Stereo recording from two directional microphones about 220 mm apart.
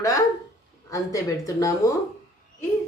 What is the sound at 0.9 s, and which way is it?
Speech, 15° left (ahead or behind).